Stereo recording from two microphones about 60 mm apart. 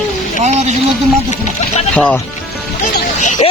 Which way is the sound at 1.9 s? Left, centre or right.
Left.